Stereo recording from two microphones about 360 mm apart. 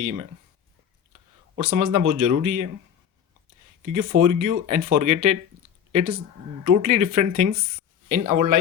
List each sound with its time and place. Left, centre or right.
0.0 s speech: right
1.5 s speech: right
3.9 s speech: right